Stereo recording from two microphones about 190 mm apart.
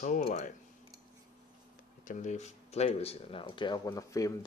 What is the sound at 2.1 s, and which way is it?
Speech, 40° left (ahead or behind).